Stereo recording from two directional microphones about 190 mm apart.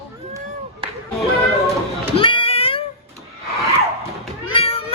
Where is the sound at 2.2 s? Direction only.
30° left (ahead or behind).